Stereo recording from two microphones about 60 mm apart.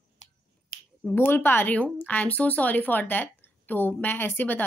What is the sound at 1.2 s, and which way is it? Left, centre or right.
Speech, left.